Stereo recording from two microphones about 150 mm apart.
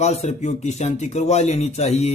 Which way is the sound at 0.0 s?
45° left (ahead or behind).